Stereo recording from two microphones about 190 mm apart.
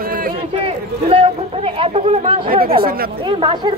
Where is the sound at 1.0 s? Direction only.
30° right (ahead or behind).